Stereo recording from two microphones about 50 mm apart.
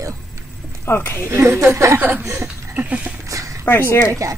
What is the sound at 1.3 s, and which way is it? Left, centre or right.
Speech, right.